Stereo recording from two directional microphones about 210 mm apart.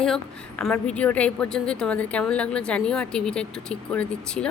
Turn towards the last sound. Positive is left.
turn(degrees=5)  # may be behind; listen again after turning